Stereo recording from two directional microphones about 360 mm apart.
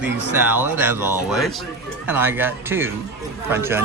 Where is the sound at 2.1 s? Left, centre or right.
Centre.